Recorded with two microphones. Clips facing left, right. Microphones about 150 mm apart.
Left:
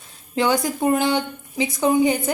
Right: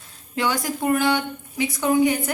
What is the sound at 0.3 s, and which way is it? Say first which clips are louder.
A woman's voice: left 4 dB; 20° left (ahead or behind).